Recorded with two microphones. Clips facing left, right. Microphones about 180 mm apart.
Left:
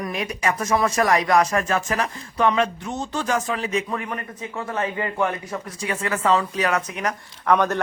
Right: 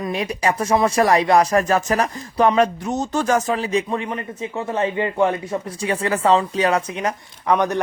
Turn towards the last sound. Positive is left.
turn(degrees=-15)  # may be behind; listen again after turning